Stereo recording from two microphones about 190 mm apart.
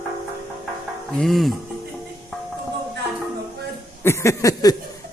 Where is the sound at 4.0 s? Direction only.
15° left (ahead or behind).